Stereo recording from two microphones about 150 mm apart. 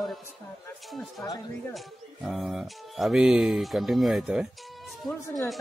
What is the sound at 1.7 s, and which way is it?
Speech, centre (ahead or behind).